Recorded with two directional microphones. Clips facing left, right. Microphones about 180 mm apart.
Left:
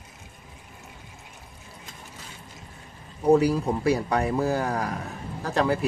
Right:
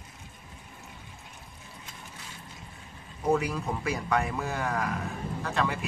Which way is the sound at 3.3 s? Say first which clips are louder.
Left 7 dB; 35° left (ahead or behind).